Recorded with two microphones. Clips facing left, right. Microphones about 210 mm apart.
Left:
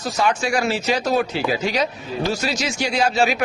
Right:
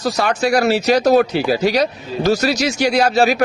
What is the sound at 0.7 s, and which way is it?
Speech, 65° right (ahead or behind).